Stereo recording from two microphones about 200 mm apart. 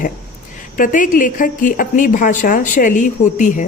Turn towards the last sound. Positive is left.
turn(degrees=40)  # may be behind; listen again after turning